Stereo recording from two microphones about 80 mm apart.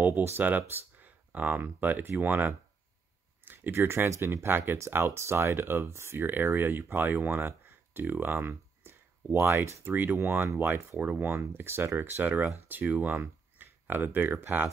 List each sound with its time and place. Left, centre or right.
0.0 s speech: right